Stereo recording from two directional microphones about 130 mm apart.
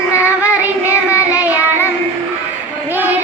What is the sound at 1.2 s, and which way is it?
Child singing, 10° right (ahead or behind).